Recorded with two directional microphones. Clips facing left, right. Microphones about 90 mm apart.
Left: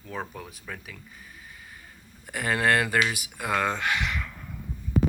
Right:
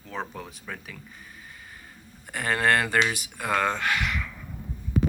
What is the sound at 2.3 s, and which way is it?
Speech, 5° left (ahead or behind).